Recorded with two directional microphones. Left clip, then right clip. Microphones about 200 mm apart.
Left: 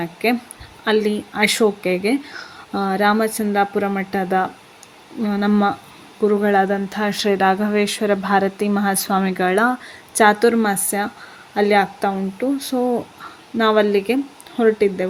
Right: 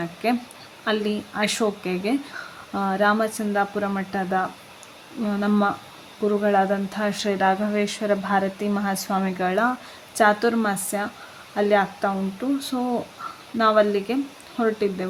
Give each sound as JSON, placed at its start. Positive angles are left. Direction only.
{"t": 0.0, "sound": "a woman's voice", "side_deg": 15}